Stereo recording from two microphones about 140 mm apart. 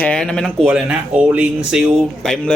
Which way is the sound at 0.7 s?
10° right (ahead or behind).